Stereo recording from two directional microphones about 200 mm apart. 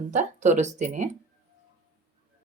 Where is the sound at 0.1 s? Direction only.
35° right (ahead or behind).